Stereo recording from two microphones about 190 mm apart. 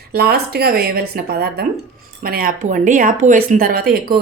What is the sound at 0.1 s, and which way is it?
A woman's voice, 55° right (ahead or behind).